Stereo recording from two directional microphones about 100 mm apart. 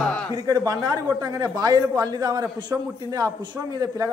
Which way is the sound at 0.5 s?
40° right (ahead or behind).